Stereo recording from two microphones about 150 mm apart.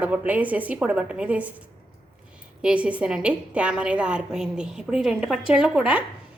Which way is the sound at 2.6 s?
10° right (ahead or behind).